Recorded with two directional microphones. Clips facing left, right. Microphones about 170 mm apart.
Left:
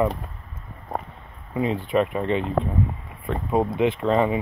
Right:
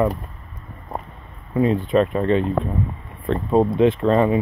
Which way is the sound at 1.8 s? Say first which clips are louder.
Right 4 dB; 15° left (ahead or behind).